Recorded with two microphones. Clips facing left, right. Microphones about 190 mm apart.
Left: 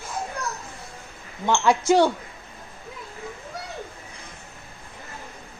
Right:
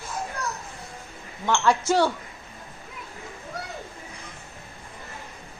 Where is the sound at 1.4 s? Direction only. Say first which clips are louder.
Left 2 dB; 15° left (ahead or behind).